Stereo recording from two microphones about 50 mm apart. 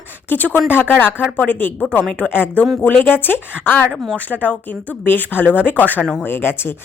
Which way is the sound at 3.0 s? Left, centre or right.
Left.